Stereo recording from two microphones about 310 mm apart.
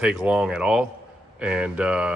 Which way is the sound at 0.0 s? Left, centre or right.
Centre.